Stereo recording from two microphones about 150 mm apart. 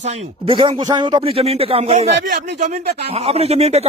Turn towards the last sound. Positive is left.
turn(degrees=-45)  # may be behind; listen again after turning